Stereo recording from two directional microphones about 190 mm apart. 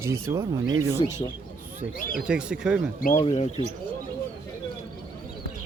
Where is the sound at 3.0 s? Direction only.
45° left (ahead or behind).